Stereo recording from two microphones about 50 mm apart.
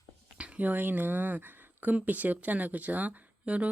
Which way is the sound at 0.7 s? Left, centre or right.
Right.